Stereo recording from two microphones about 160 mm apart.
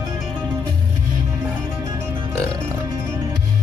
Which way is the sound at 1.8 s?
20° right (ahead or behind).